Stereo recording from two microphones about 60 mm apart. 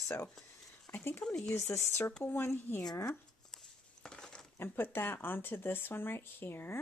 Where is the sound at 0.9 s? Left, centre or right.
Left.